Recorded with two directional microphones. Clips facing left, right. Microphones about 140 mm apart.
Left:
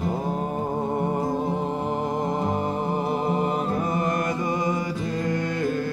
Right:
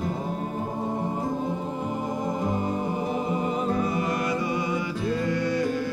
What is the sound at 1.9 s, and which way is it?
Music, 60° left (ahead or behind).